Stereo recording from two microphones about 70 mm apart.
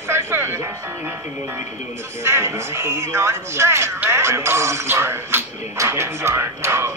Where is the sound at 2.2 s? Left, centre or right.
Right.